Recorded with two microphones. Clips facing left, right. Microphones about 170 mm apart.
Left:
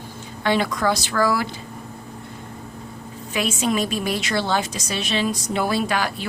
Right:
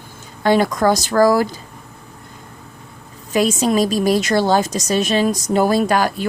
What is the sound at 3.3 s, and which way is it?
A woman's voice, 40° right (ahead or behind).